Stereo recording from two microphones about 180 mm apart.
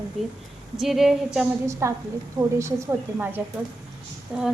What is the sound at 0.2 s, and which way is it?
Speech, centre (ahead or behind).